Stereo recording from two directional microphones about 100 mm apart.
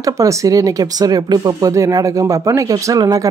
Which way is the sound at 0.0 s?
35° right (ahead or behind).